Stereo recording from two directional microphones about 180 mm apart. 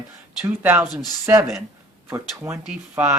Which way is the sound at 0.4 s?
10° right (ahead or behind).